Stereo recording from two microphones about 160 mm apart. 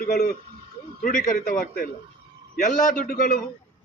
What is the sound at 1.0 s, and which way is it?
A man's voice, 55° left (ahead or behind).